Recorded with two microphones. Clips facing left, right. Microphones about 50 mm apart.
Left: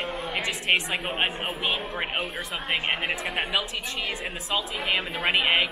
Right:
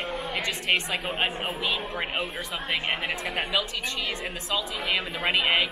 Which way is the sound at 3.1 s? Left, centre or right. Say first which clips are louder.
Left 1 dB; centre.